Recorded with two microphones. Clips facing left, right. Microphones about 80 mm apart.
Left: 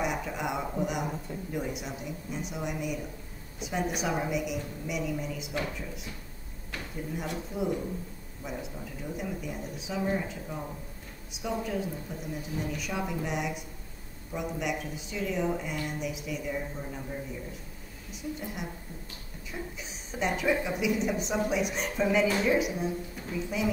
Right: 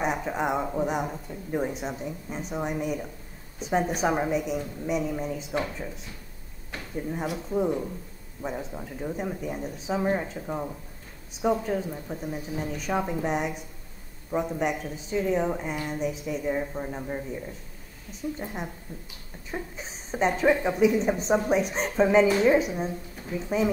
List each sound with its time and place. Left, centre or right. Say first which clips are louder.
0.0 s a woman's voice: right 4 dB; right
8.4 s a woman's voice: right 5 dB; right
18.4 s a woman's voice: right 3 dB; right